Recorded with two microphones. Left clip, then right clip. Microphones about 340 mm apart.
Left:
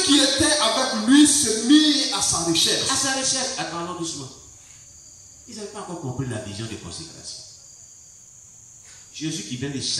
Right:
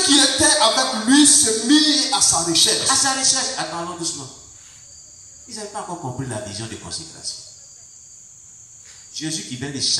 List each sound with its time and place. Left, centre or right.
0.1 s music: centre
6.1 s a man's voice: centre
9.1 s a man's voice: centre